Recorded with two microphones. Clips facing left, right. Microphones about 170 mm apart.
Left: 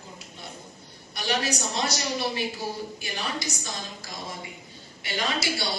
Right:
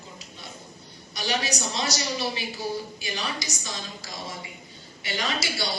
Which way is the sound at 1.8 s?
55° left (ahead or behind).